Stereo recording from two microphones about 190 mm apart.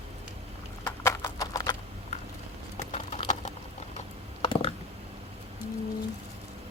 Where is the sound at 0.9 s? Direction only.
15° left (ahead or behind).